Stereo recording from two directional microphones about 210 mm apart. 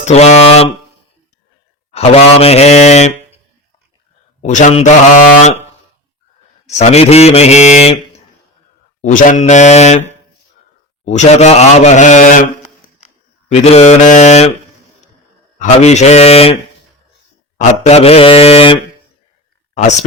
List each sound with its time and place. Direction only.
0.0 s speech: 30° left (ahead or behind)
2.0 s a man's voice: 30° left (ahead or behind)
4.4 s speech: 35° left (ahead or behind)
6.7 s speech: 30° left (ahead or behind)
9.0 s speech: 35° left (ahead or behind)
11.0 s speech: 35° left (ahead or behind)
15.5 s speech: 35° left (ahead or behind)
17.6 s a man's voice: 30° left (ahead or behind)